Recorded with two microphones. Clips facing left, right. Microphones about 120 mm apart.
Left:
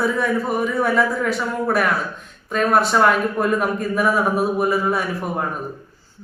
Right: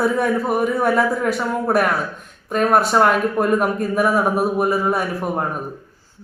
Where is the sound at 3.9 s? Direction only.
5° right (ahead or behind).